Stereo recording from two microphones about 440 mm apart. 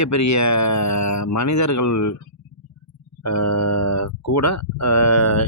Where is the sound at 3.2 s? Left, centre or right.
Left.